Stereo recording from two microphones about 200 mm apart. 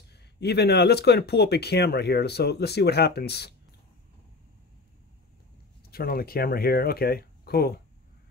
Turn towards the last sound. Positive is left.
turn(degrees=50)  # may be behind; listen again after turning